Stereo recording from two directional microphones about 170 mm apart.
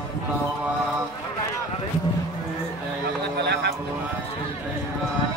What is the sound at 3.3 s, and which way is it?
Vehicle, 80° right.